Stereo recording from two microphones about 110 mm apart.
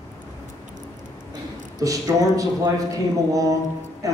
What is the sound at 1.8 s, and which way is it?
A man's voice, 30° right (ahead or behind).